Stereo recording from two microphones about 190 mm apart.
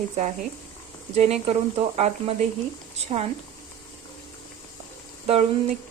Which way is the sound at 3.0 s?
30° right (ahead or behind).